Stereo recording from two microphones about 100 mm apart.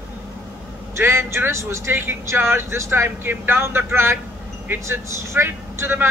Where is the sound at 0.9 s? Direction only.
25° right (ahead or behind).